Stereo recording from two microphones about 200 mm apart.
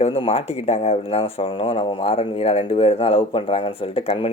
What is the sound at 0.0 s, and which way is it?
Speech, 30° left (ahead or behind).